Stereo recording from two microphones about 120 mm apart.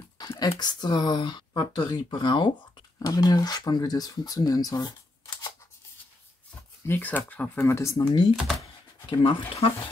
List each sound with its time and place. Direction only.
0.2 s a sound: 35° left (ahead or behind)
0.6 s speech: 35° left (ahead or behind)
6.9 s speech: 15° left (ahead or behind)
7.6 s speech: 25° left (ahead or behind)
7.9 s speech: 40° left (ahead or behind)